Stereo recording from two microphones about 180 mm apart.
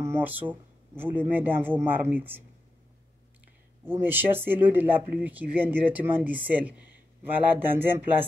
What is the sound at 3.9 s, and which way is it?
Speech, 10° right (ahead or behind).